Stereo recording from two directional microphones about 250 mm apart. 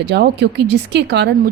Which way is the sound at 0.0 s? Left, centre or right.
Right.